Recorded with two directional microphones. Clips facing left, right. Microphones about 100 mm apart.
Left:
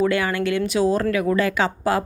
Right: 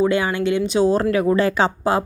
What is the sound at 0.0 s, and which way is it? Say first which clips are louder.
A woman's voice: right 2 dB; 20° right (ahead or behind).